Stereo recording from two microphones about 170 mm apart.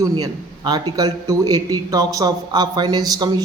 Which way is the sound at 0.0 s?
25° right (ahead or behind).